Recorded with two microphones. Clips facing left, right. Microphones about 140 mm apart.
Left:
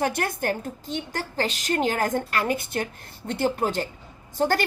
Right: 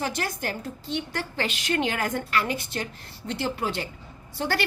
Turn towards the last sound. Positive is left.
turn(degrees=45)  # may be behind; listen again after turning